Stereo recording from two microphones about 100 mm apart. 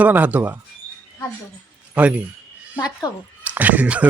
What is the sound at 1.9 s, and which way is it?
Speech, 15° right (ahead or behind).